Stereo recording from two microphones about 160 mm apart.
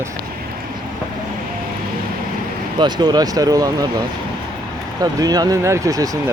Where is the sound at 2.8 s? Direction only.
25° right (ahead or behind).